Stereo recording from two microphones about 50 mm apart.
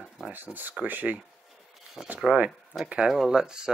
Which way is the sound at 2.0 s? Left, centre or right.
Centre.